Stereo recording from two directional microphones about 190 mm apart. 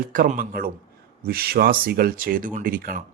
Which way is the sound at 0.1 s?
45° right (ahead or behind).